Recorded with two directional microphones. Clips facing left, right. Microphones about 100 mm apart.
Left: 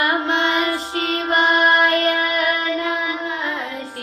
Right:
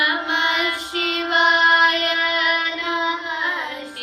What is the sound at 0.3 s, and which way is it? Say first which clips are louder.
Child singing: left 3 dB; 25° left (ahead or behind).